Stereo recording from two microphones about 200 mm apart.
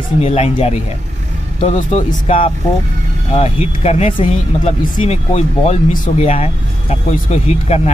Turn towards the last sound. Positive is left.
turn(degrees=35)  # may be behind; listen again after turning